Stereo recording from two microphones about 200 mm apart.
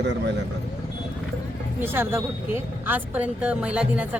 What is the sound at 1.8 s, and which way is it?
A woman's voice, 10° right (ahead or behind).